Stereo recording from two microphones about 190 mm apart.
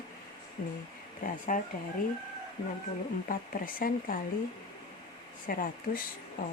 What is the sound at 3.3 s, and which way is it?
Speech, 45° left (ahead or behind).